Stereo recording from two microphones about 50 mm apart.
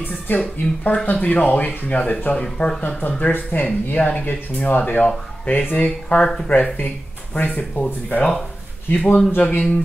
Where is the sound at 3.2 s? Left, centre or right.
Left.